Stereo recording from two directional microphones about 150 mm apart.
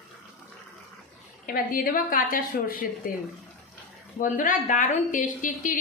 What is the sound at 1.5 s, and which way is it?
A woman's voice, 70° left (ahead or behind).